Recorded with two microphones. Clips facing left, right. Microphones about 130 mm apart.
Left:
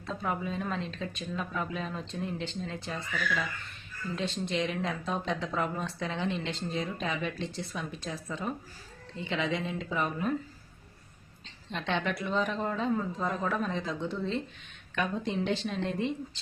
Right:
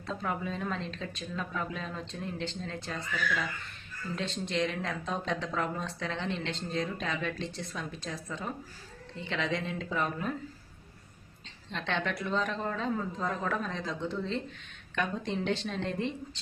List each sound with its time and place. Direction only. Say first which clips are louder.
0.0 s speech: left 1 dB; 5° left (ahead or behind)
11.7 s speech: left 2 dB; 5° left (ahead or behind)